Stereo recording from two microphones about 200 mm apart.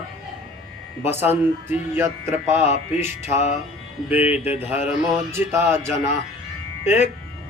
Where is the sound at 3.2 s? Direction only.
35° left (ahead or behind).